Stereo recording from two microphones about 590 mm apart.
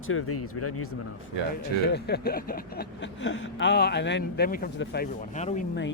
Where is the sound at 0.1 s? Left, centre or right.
Left.